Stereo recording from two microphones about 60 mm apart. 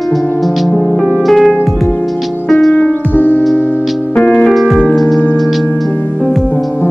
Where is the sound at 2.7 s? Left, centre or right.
Left.